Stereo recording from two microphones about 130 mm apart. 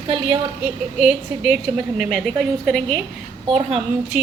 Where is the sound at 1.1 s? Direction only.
5° right (ahead or behind).